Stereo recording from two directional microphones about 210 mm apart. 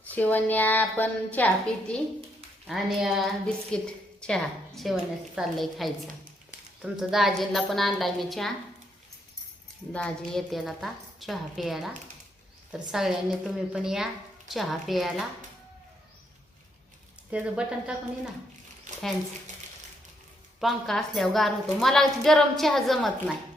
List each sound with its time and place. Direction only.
0.1 s a woman's voice: 10° left (ahead or behind)
2.6 s a woman's voice: centre (ahead or behind)
9.9 s a woman's voice: 5° left (ahead or behind)
12.9 s a woman's voice: centre (ahead or behind)
17.3 s a woman's voice: 5° right (ahead or behind)
18.9 s a sound: 35° right (ahead or behind)
20.6 s a woman's voice: centre (ahead or behind)